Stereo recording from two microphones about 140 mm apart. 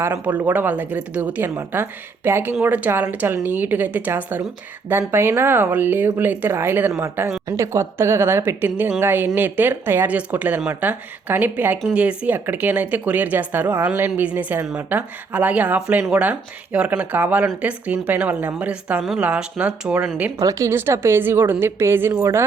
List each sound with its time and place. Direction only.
0.0 s speech: 15° right (ahead or behind)
20.4 s speech: 25° right (ahead or behind)